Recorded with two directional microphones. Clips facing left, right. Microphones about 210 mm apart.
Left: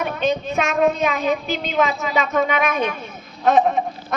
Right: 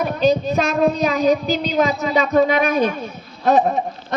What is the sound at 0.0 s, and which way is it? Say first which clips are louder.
A child's voice: right 4 dB; 35° right (ahead or behind).